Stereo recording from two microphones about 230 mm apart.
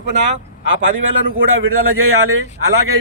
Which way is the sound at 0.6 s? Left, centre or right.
Right.